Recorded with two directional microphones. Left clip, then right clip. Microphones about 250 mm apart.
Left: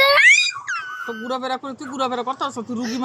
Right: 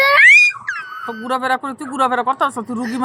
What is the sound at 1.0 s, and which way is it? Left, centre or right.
Speech, centre.